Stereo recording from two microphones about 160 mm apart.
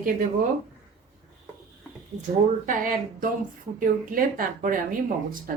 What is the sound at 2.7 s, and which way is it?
Speech, 60° right (ahead or behind).